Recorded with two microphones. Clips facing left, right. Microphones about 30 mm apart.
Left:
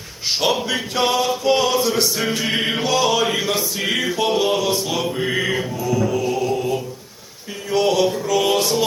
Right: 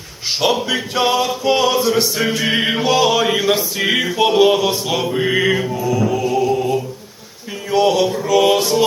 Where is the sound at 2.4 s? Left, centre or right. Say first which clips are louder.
Right 3 dB; centre.